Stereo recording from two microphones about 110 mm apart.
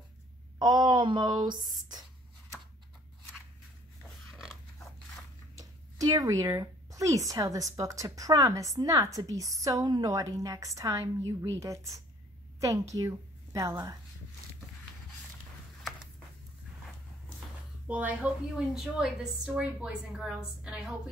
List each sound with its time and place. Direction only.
0.6 s speech: 40° right (ahead or behind)
4.3 s a sound: centre (ahead or behind)
6.0 s a woman's voice: 35° right (ahead or behind)
17.8 s a woman's voice: 15° right (ahead or behind)